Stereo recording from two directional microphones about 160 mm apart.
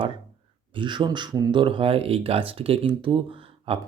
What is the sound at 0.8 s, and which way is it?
Speech, 30° right (ahead or behind).